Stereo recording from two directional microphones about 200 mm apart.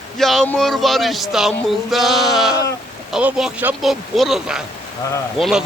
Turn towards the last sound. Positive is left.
turn(degrees=0)  # may be behind; listen again after turning